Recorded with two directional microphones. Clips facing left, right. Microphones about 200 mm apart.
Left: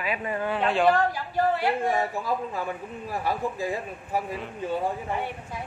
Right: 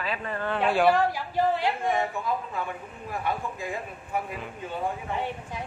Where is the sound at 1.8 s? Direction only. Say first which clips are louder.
Left 1 dB; 35° left (ahead or behind).